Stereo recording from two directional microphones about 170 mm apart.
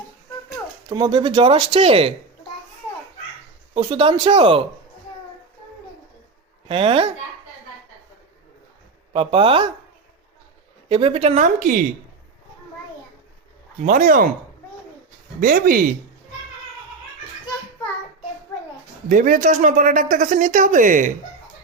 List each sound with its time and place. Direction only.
0.9 s speech: 25° right (ahead or behind)
3.8 s speech: 30° right (ahead or behind)
6.7 s speech: 35° right (ahead or behind)
9.1 s speech: 30° right (ahead or behind)
10.8 s speech: 35° right (ahead or behind); by 11.9 s 55° right (ahead or behind)
13.8 s speech: 50° right (ahead or behind)
15.4 s speech: 55° right (ahead or behind)
19.0 s speech: 50° right (ahead or behind)